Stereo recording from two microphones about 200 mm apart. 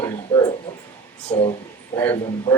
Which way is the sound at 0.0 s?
15° left (ahead or behind).